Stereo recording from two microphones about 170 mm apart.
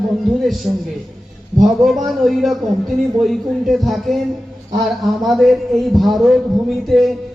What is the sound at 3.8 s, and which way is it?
A man's voice, centre (ahead or behind).